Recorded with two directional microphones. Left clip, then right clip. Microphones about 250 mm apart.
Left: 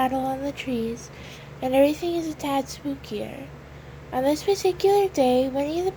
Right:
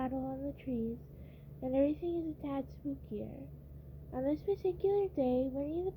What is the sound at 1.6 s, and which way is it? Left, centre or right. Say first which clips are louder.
A woman's voice: left 12 dB; centre.